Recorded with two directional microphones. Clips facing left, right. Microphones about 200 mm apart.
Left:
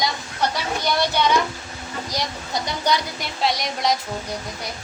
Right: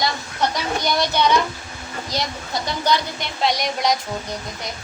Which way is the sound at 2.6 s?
15° left (ahead or behind).